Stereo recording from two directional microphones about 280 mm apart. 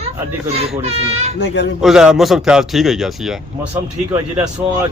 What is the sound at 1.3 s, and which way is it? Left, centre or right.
Speech, left.